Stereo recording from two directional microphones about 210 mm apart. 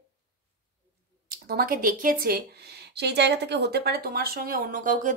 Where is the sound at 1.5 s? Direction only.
45° right (ahead or behind).